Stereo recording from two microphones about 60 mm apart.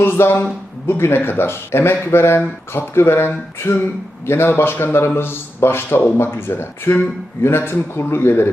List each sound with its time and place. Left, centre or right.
0.0 s a man's voice: left